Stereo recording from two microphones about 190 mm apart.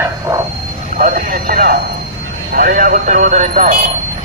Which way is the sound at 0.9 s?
45° right (ahead or behind).